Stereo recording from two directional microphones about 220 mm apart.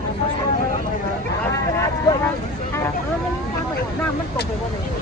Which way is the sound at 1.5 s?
15° left (ahead or behind).